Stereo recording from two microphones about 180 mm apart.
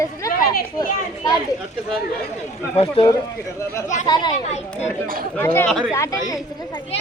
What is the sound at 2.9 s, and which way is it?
Speech, 20° left (ahead or behind).